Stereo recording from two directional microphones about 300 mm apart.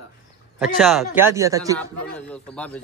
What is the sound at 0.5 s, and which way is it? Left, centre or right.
A man's voice, centre.